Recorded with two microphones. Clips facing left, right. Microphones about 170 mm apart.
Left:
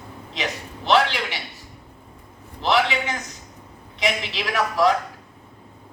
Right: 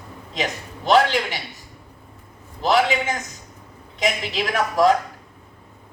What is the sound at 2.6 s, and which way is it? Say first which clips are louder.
A woman's voice: right 2 dB; 45° right (ahead or behind).